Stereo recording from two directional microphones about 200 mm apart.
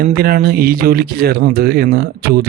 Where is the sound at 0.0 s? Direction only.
50° right (ahead or behind).